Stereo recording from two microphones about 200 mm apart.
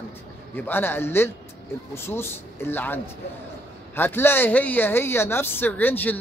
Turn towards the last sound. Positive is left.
turn(degrees=10)  # may be behind; listen again after turning